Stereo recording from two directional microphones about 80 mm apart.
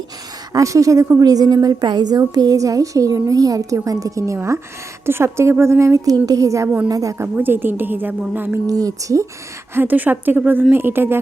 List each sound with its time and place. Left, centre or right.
0.5 s a woman's voice: right
6.1 s a woman's voice: right
7.3 s a woman's voice: right
8.6 s a woman's voice: right
9.7 s a woman's voice: right